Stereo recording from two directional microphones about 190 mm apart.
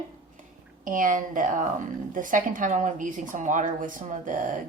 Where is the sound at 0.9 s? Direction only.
45° right (ahead or behind).